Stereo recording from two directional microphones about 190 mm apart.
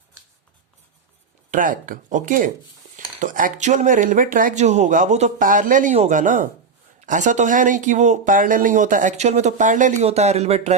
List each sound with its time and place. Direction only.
1.5 s speech: 45° right (ahead or behind)